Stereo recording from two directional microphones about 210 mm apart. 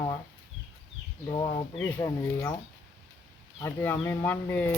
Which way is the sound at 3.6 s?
10° left (ahead or behind).